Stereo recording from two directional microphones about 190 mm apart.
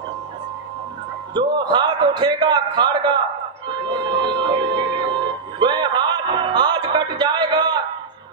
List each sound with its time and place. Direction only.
1.3 s a man's voice: 25° right (ahead or behind)
3.6 s music: 25° right (ahead or behind)